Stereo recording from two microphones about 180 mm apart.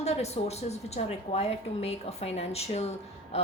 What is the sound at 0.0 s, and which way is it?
A woman's voice, 35° left (ahead or behind).